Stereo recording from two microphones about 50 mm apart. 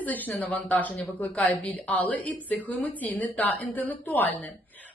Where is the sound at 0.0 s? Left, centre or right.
Left.